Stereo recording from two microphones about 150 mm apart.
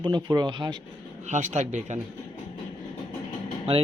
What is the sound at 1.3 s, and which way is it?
Speech, 55° right (ahead or behind).